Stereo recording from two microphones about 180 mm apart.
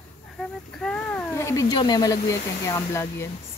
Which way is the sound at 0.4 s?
5° left (ahead or behind).